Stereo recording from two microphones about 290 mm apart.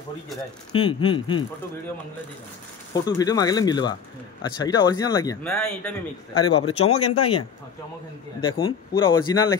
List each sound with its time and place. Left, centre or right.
0.7 s speech: centre
2.9 s speech: centre
5.5 s speech: centre
6.4 s speech: centre